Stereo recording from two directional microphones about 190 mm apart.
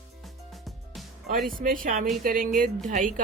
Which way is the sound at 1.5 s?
50° right (ahead or behind).